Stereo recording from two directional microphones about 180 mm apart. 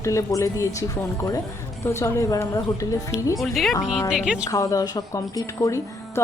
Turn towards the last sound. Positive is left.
turn(degrees=15)  # may be behind; listen again after turning